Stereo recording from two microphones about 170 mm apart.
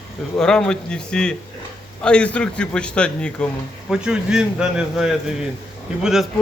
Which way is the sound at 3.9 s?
5° right (ahead or behind).